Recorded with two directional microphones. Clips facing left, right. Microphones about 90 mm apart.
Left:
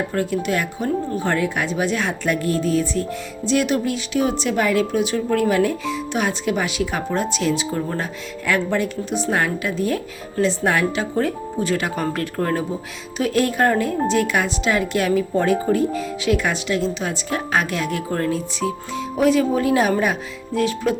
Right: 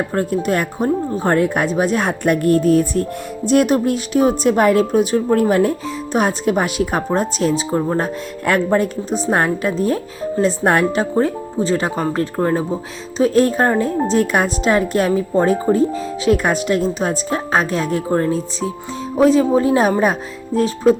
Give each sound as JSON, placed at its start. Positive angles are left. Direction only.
{"t": 0.1, "sound": "a woman's voice", "side_deg": -40}